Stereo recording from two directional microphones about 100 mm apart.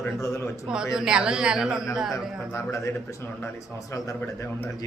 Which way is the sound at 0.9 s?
5° right (ahead or behind).